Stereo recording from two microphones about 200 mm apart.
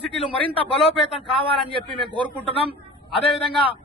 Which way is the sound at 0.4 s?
25° left (ahead or behind).